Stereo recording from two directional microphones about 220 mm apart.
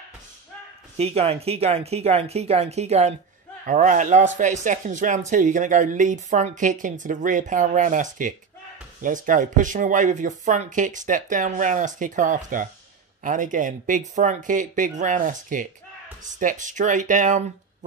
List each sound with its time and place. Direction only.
0.9 s speech: 25° right (ahead or behind)